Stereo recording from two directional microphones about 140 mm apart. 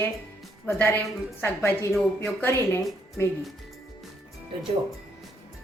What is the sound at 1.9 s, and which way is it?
Speech, centre (ahead or behind).